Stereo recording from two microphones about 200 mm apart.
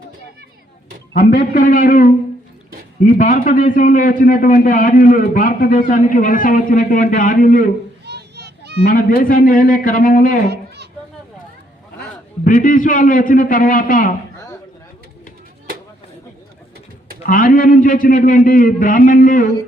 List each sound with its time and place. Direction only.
1.2 s a man's voice: 45° left (ahead or behind)
8.0 s children playing: 55° right (ahead or behind)
8.8 s a man's voice: 45° left (ahead or behind)
12.5 s a man's voice: 40° left (ahead or behind)
17.2 s a man's voice: 45° left (ahead or behind)